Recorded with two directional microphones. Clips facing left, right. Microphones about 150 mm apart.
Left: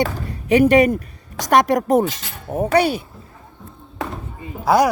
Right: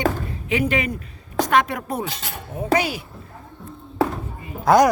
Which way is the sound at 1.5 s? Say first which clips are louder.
Left 7 dB; 45° left (ahead or behind).